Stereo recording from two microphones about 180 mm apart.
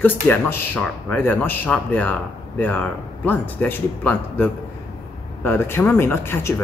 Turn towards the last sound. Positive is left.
turn(degrees=15)  # may be behind; listen again after turning